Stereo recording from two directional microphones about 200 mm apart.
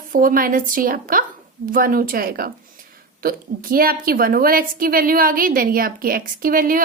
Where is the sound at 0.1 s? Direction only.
45° right (ahead or behind).